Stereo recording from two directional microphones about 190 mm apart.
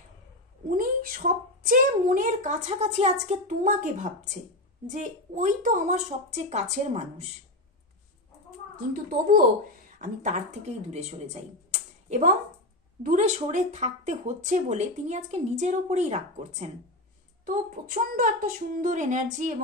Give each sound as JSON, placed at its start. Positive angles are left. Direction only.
{"t": 0.7, "sound": "a woman's voice", "side_deg": -45}
{"t": 8.9, "sound": "speech", "side_deg": -45}